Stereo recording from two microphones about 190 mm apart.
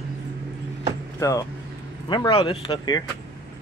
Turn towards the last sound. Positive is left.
turn(degrees=25)  # may be behind; listen again after turning